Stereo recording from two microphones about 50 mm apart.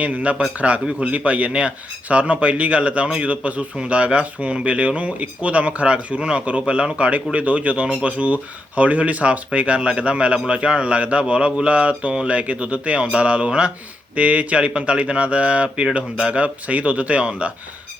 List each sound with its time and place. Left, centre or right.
0.0 s speech: right